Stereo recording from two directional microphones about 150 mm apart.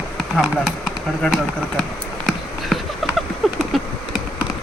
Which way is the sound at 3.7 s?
Centre (ahead or behind).